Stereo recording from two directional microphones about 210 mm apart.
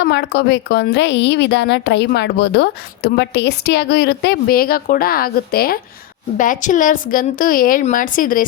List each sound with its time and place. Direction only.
0.0 s a woman's voice: 50° left (ahead or behind)